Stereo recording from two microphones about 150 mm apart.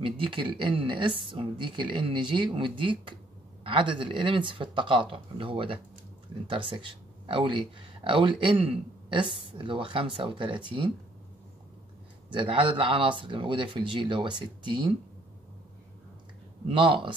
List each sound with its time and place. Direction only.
0.0 s a woman's voice: 35° right (ahead or behind)
12.3 s a woman's voice: 35° right (ahead or behind)
16.6 s a woman's voice: 35° right (ahead or behind)